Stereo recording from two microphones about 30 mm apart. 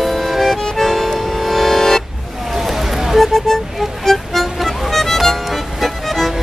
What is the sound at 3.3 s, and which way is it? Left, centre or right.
Music, centre.